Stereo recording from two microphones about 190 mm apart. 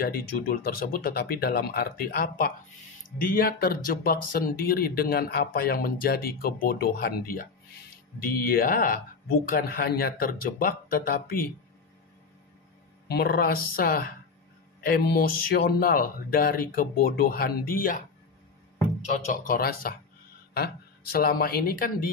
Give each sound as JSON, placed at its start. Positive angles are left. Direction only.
{"t": 0.0, "sound": "speech", "side_deg": 55}
{"t": 13.1, "sound": "speech", "side_deg": 55}